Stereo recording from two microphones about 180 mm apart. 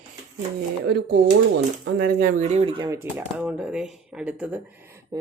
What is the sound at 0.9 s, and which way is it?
Speech, 65° right (ahead or behind).